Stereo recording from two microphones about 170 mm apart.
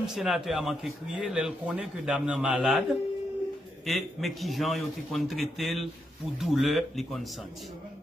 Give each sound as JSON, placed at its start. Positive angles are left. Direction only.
{"t": 0.0, "sound": "a man's voice", "side_deg": 0}